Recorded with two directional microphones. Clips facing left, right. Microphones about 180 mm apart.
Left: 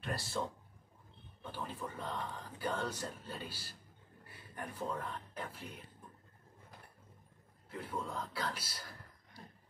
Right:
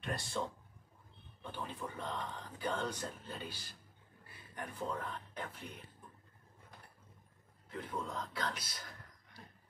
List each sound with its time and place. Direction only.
0.4 s speech: 5° left (ahead or behind)
7.7 s speech: 10° left (ahead or behind)